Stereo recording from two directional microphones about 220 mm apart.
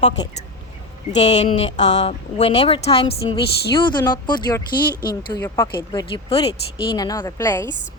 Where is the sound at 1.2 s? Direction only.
30° left (ahead or behind); by 7.7 s 15° left (ahead or behind).